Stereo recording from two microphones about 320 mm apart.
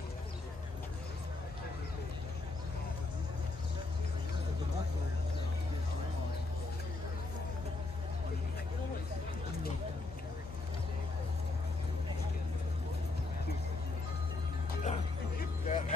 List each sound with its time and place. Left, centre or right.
14.9 s music: left